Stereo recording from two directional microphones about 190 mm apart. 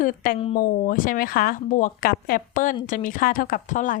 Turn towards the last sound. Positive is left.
turn(degrees=40)  # may be behind; listen again after turning